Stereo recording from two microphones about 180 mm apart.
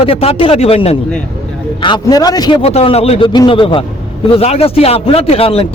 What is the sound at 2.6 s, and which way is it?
A man's voice, 35° left (ahead or behind).